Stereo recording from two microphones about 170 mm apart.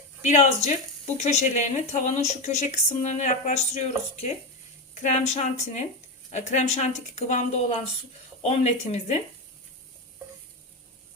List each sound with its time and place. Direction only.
0.3 s speech: 40° left (ahead or behind)